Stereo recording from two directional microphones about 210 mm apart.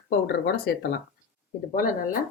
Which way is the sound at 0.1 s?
50° left (ahead or behind).